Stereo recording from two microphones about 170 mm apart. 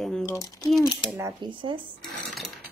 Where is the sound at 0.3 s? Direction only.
20° left (ahead or behind).